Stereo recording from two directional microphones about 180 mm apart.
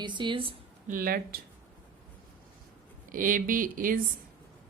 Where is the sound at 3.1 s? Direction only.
50° right (ahead or behind).